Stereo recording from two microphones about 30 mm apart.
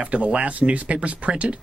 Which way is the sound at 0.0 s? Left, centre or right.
Right.